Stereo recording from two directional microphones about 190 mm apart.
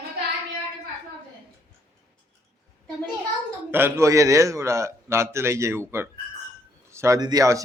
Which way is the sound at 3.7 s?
15° right (ahead or behind).